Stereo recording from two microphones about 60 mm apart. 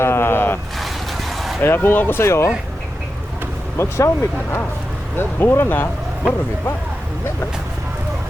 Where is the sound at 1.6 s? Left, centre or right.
Left.